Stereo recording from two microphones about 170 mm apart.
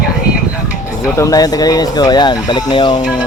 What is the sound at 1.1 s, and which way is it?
Speech, 20° left (ahead or behind).